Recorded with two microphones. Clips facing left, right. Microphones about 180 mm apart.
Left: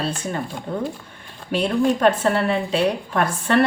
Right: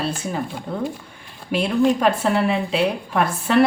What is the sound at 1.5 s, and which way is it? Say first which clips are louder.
Speech: right 1 dB; 10° right (ahead or behind).